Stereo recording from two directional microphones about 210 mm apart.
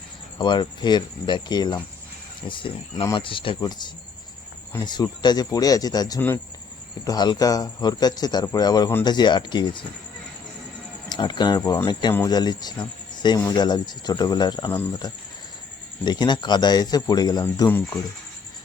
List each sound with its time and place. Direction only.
0.3 s speech: 20° left (ahead or behind)
11.1 s speech: 20° left (ahead or behind)